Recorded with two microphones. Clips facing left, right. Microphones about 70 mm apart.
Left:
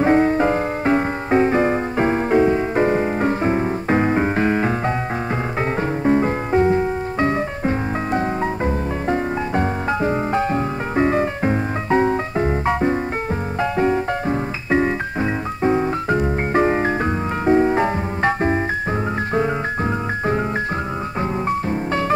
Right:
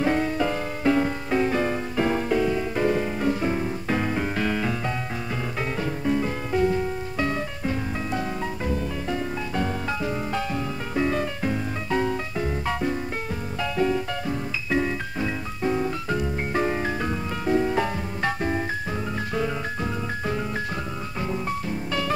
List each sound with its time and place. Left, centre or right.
0.0 s music: left